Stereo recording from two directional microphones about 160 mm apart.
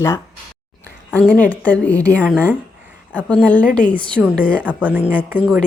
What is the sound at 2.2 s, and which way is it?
Speech, 10° right (ahead or behind).